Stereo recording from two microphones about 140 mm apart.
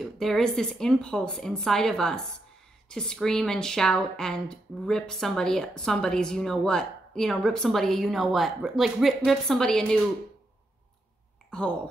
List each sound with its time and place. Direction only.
0.0 s speech: centre (ahead or behind)
11.5 s speech: 5° left (ahead or behind)